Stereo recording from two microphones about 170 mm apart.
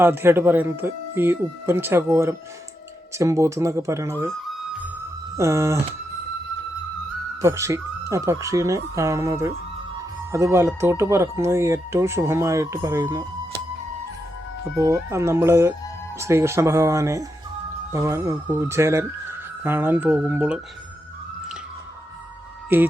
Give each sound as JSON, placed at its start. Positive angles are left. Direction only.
{"t": 0.0, "sound": "speech", "side_deg": -15}
{"t": 5.4, "sound": "speech", "side_deg": -15}
{"t": 7.4, "sound": "speech", "side_deg": -15}
{"t": 14.8, "sound": "speech", "side_deg": -15}
{"t": 22.7, "sound": "speech", "side_deg": -10}